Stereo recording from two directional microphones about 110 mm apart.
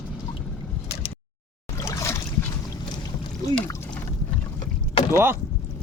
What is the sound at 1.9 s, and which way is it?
Boat, 30° left (ahead or behind).